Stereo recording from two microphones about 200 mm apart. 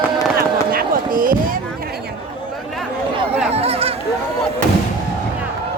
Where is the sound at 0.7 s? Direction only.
45° right (ahead or behind).